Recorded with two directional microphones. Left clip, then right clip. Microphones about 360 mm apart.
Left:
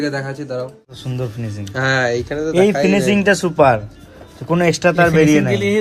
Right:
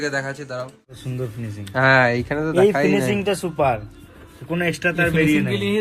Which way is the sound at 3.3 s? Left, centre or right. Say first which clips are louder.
Left 7 dB; left.